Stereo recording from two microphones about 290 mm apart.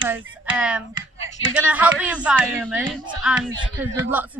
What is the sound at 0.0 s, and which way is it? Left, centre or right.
A woman's voice, centre.